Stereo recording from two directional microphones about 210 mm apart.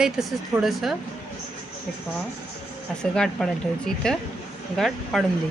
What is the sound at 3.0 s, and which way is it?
Speech, centre (ahead or behind).